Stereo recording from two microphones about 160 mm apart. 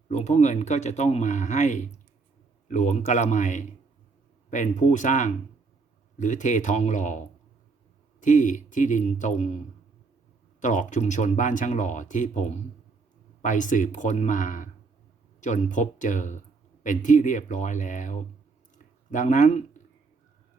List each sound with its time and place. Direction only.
0.1 s speech: 45° left (ahead or behind)
10.6 s speech: 50° left (ahead or behind)